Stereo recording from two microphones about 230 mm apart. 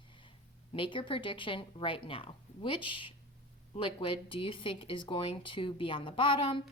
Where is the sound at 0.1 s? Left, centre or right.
Left.